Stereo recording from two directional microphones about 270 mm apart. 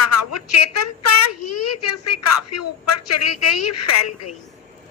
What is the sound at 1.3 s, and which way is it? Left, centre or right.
A woman's voice, left.